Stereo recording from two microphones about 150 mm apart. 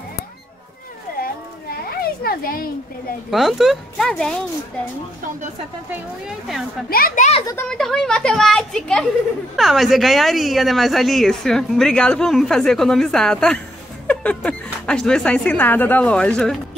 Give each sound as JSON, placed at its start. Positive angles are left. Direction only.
{"t": 1.2, "sound": "a sound", "side_deg": 85}
{"t": 3.3, "sound": "speech", "side_deg": 0}
{"t": 5.9, "sound": "speech", "side_deg": -5}
{"t": 6.9, "sound": "a child's voice", "side_deg": 75}
{"t": 7.6, "sound": "speech", "side_deg": 5}